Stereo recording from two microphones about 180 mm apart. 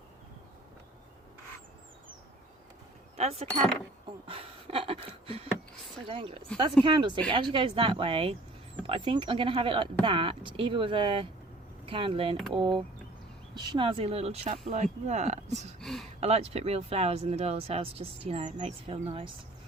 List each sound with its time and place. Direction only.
3.2 s speech: 35° right (ahead or behind)
4.0 s a sound: 30° right (ahead or behind)
6.1 s speech: 30° right (ahead or behind)
15.8 s speech: centre (ahead or behind)
16.2 s speech: 35° right (ahead or behind)